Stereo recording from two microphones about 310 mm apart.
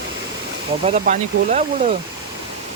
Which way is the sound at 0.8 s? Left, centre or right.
Right.